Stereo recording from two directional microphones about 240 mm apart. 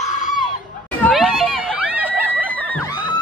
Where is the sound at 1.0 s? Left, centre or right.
Centre.